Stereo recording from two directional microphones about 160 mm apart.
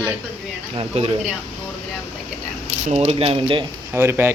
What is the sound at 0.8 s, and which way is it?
Speech, 40° right (ahead or behind).